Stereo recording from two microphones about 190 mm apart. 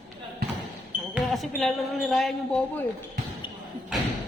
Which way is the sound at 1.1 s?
Centre (ahead or behind).